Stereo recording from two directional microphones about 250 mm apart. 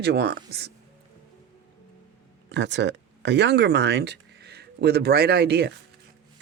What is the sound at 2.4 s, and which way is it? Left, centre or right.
Speech, right.